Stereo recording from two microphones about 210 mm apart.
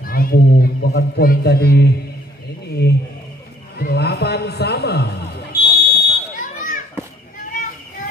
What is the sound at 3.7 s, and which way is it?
A man's voice, 50° left (ahead or behind).